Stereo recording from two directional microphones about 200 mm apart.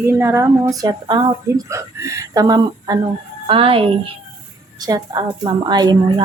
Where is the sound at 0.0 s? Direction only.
10° right (ahead or behind).